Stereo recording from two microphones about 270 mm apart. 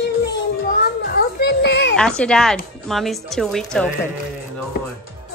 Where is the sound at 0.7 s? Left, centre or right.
Left.